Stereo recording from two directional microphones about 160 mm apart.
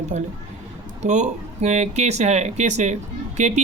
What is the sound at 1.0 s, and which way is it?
Speech, 45° right (ahead or behind).